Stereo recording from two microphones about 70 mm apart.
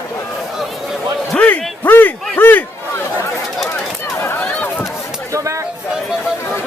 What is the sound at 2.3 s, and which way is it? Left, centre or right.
Crowd, left.